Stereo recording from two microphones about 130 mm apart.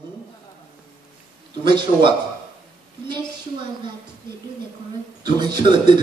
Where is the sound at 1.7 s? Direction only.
40° right (ahead or behind).